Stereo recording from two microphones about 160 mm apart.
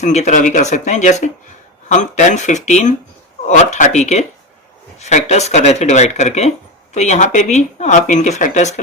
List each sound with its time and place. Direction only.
0.0 s speech: 50° left (ahead or behind)